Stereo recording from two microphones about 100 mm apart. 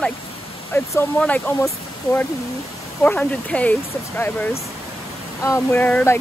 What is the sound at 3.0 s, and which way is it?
Speech, 15° left (ahead or behind).